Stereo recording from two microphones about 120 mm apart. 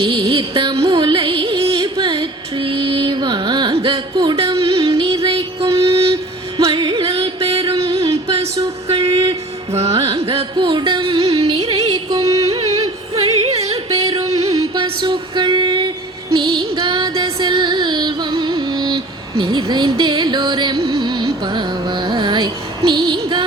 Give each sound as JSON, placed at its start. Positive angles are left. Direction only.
{"t": 0.0, "sound": "music", "side_deg": -50}
{"t": 6.6, "sound": "music", "side_deg": -40}
{"t": 8.9, "sound": "a sound", "side_deg": -50}
{"t": 9.9, "sound": "music", "side_deg": -55}
{"t": 10.5, "sound": "music", "side_deg": -40}
{"t": 11.6, "sound": "music", "side_deg": -30}
{"t": 12.5, "sound": "music", "side_deg": -60}
{"t": 14.8, "sound": "a sound", "side_deg": -40}
{"t": 16.3, "sound": "music", "side_deg": -40}
{"t": 17.4, "sound": "a sound", "side_deg": -40}
{"t": 23.0, "sound": "music", "side_deg": -40}